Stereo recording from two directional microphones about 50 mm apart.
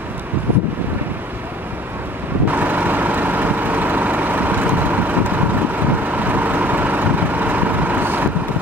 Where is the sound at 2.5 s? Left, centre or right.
Right.